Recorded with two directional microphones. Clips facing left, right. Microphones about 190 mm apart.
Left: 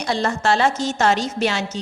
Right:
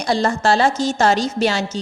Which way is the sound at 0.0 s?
35° right (ahead or behind).